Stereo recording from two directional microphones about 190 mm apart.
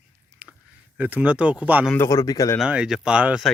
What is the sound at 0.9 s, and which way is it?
Speech, 10° right (ahead or behind).